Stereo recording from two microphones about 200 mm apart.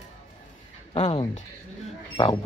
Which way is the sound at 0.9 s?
30° left (ahead or behind).